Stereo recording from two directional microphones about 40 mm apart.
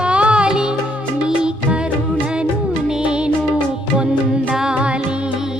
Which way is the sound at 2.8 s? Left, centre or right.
Centre.